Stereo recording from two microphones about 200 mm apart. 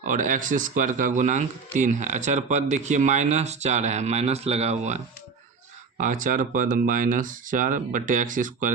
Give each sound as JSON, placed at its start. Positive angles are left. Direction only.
{"t": 0.0, "sound": "speech", "side_deg": -40}
{"t": 6.0, "sound": "speech", "side_deg": -40}